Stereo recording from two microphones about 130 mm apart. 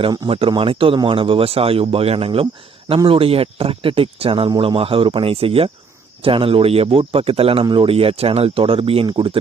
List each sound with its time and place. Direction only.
0.3 s speech: 45° right (ahead or behind)